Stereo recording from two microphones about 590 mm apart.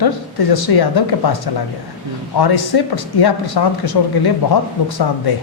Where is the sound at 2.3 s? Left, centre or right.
Left.